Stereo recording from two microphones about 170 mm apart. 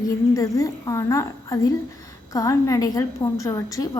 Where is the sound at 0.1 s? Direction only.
20° left (ahead or behind).